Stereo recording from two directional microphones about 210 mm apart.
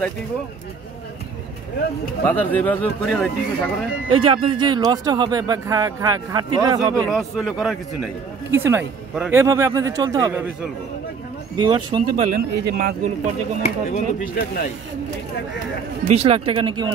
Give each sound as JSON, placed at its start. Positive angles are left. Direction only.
{"t": 2.2, "sound": "speech", "side_deg": 10}
{"t": 4.1, "sound": "speech", "side_deg": -25}
{"t": 7.0, "sound": "a man's voice", "side_deg": 0}
{"t": 11.5, "sound": "speech", "side_deg": -20}
{"t": 12.6, "sound": "speech", "side_deg": -45}
{"t": 13.6, "sound": "speech", "side_deg": 35}
{"t": 16.1, "sound": "speech", "side_deg": -30}